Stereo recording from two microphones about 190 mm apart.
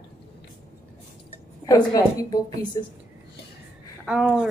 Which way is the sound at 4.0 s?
5° right (ahead or behind).